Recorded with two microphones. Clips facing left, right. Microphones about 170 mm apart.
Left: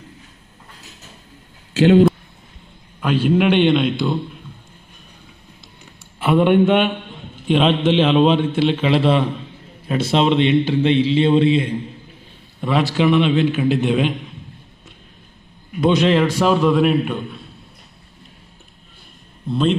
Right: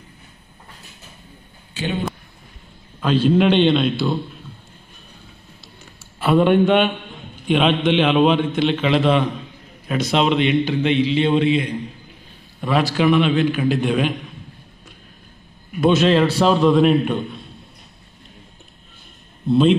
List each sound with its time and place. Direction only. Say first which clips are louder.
1.7 s speech: left 13 dB; 90° left
3.0 s a man's voice: right 1 dB; 10° left (ahead or behind)
6.3 s a man's voice: left 1 dB; centre (ahead or behind)
7.6 s a man's voice: left 1 dB; 30° left (ahead or behind)
12.5 s a sound: even; 20° left (ahead or behind)
12.9 s a man's voice: left 1 dB; 25° left (ahead or behind)
15.8 s a man's voice: even; 15° left (ahead or behind)